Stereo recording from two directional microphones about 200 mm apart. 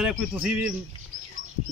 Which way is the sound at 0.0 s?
5° right (ahead or behind).